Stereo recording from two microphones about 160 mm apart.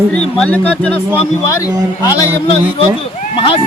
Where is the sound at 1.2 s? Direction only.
20° left (ahead or behind).